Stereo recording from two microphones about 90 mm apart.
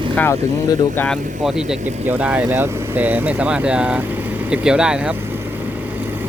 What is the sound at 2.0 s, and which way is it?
Speech, 20° right (ahead or behind).